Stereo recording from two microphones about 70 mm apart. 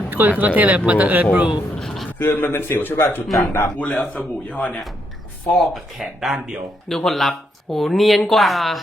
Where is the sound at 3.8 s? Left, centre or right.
Centre.